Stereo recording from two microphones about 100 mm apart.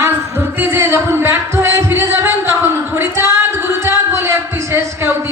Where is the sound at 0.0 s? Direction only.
25° right (ahead or behind).